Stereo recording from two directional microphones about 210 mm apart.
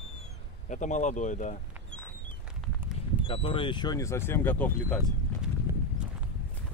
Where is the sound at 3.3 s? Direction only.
25° left (ahead or behind); by 4.9 s 10° left (ahead or behind).